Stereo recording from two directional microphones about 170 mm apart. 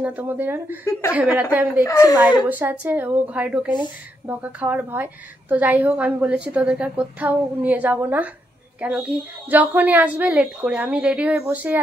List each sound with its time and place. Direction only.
0.0 s a woman's voice: 10° right (ahead or behind)
1.9 s a woman's voice: 20° left (ahead or behind)
2.4 s a woman's voice: 10° right (ahead or behind)